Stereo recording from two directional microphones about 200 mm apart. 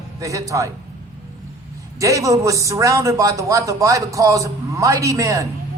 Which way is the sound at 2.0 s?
15° right (ahead or behind).